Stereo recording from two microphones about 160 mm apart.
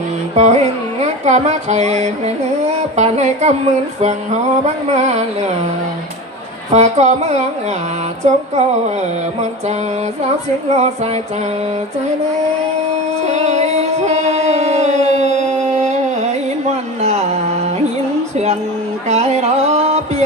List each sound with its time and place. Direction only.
0.3 s music: 45° right (ahead or behind)
6.7 s music: 45° right (ahead or behind)
10.7 s speech: 40° right (ahead or behind)
13.2 s music: 45° right (ahead or behind)
17.0 s a sound: 45° right (ahead or behind)
19.0 s a sound: 45° right (ahead or behind)